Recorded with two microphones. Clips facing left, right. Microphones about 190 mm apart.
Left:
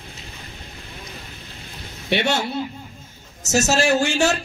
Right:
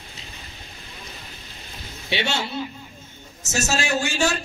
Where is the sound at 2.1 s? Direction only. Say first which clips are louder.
Left 5 dB; 55° left (ahead or behind).